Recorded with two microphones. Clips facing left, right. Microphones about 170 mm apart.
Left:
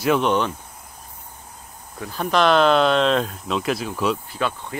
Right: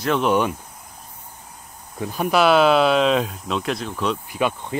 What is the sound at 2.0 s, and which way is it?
Speech, 15° right (ahead or behind).